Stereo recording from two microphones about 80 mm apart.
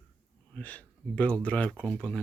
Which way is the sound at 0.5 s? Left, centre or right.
Centre.